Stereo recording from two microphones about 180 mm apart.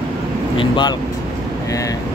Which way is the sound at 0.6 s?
25° left (ahead or behind).